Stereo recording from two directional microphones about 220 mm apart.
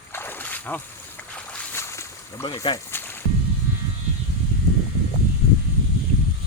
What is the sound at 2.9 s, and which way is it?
Music, 10° left (ahead or behind).